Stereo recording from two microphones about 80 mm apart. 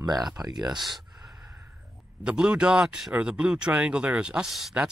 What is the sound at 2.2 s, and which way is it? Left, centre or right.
Speech, centre.